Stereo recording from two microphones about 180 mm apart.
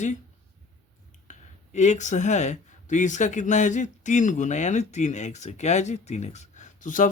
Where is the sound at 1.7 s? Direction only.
40° left (ahead or behind).